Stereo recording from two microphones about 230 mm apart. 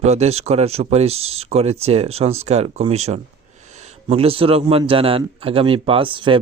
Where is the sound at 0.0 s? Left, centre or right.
Right.